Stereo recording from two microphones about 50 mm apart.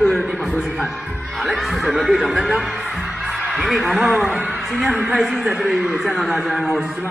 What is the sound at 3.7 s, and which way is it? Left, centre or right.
Speech, centre.